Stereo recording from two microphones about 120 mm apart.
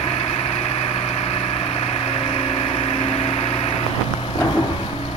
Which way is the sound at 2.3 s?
50° left (ahead or behind).